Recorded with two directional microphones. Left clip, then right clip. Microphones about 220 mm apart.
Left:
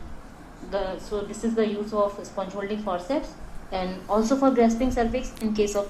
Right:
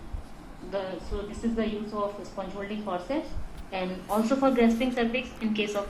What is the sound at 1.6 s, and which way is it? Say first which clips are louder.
A woman's voice: left 8 dB; 45° left (ahead or behind).